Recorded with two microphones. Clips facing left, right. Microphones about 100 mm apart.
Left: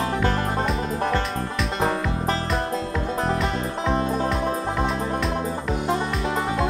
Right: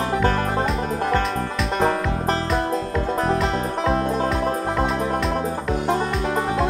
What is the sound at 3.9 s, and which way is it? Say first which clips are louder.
Music: right 2 dB; 45° right (ahead or behind).